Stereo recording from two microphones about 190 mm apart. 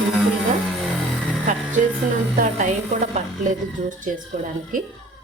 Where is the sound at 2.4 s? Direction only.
40° right (ahead or behind).